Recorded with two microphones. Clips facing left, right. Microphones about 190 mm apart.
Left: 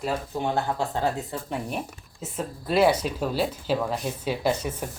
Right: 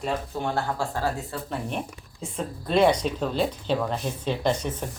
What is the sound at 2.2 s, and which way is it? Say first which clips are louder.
Speech: even; 5° left (ahead or behind).